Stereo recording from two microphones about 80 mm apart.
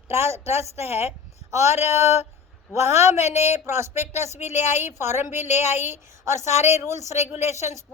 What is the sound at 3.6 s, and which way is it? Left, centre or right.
A woman's voice, right.